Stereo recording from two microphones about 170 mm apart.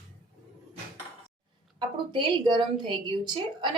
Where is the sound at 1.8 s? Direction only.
25° right (ahead or behind).